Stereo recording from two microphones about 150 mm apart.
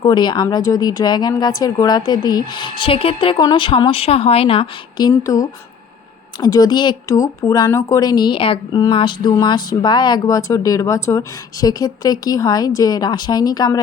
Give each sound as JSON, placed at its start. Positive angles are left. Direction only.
{"t": 0.0, "sound": "a woman's voice", "side_deg": 30}